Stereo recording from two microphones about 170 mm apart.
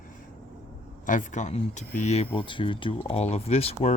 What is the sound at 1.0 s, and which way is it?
Speech, 45° left (ahead or behind).